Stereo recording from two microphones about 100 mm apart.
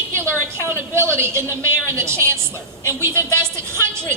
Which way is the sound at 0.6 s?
25° right (ahead or behind).